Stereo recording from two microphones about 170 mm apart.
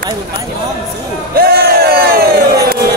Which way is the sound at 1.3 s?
65° right (ahead or behind).